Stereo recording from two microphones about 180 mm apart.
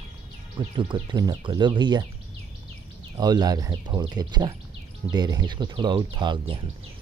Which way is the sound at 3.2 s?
20° right (ahead or behind).